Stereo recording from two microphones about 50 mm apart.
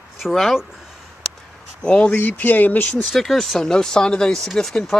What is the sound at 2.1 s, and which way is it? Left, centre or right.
Speech, left.